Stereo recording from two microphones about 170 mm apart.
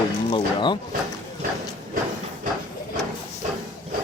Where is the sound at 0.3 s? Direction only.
30° left (ahead or behind).